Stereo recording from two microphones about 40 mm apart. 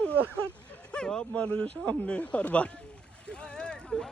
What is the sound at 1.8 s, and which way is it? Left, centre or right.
Speech, left.